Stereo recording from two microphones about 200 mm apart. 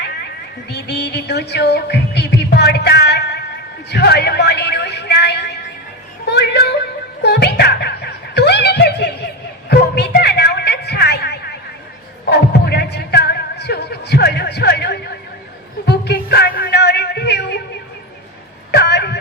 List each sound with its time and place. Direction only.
0.7 s music: 60° left (ahead or behind)
3.9 s a man's voice: 55° left (ahead or behind)
7.2 s music: 55° left (ahead or behind)
18.7 s a sound: 55° left (ahead or behind)